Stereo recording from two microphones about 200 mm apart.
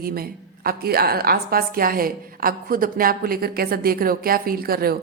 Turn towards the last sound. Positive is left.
turn(degrees=-50)  # may be behind; listen again after turning